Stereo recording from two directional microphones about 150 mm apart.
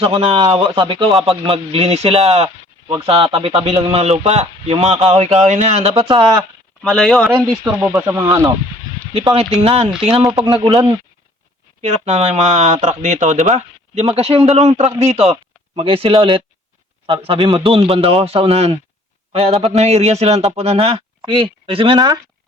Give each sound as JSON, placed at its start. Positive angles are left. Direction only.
{"t": 0.0, "sound": "speech", "side_deg": -40}
{"t": 5.9, "sound": "speech", "side_deg": -30}
{"t": 6.8, "sound": "speech", "side_deg": 0}
{"t": 7.6, "sound": "speech", "side_deg": -20}
{"t": 9.1, "sound": "speech", "side_deg": -40}
{"t": 11.8, "sound": "speech", "side_deg": -50}